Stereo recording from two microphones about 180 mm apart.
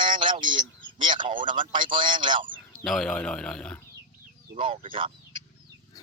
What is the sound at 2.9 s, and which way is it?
Speech, centre (ahead or behind).